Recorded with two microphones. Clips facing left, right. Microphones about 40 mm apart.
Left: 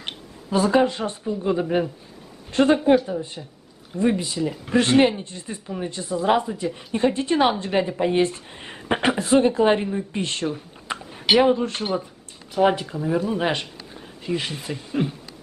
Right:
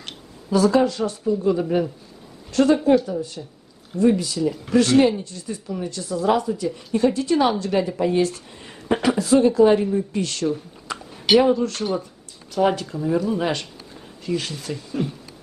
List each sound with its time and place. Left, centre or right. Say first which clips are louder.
0.0 s a woman's voice: left 3 dB; left
10.9 s a sound: right 2 dB; left
12.5 s speech: left 1 dB; centre